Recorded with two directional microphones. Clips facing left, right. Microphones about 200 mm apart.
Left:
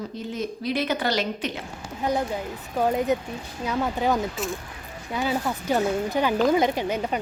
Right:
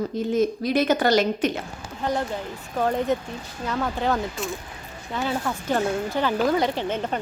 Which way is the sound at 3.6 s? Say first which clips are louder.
Left 1 dB; 15° left (ahead or behind).